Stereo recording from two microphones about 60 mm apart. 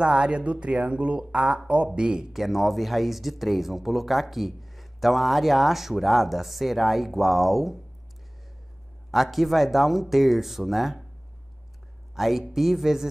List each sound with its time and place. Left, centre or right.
0.0 s speech: centre
2.4 s speech: centre
9.1 s speech: centre
12.2 s speech: centre